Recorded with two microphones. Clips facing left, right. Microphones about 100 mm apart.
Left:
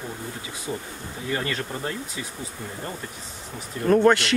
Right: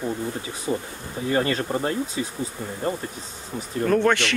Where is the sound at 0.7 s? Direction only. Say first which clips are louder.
Right 5 dB; 20° right (ahead or behind).